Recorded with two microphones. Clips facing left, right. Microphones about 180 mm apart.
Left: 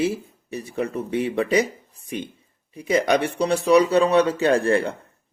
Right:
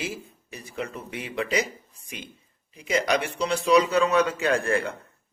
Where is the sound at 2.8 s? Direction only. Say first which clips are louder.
Left 5 dB; 30° left (ahead or behind).